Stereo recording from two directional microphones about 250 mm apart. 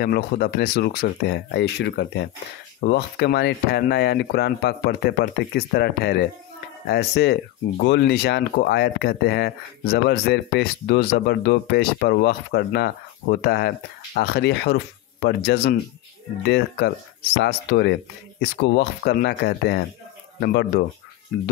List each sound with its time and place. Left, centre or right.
0.0 s speech: left